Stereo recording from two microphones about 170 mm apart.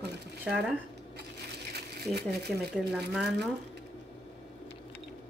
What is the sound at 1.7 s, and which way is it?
Speech, 70° right (ahead or behind).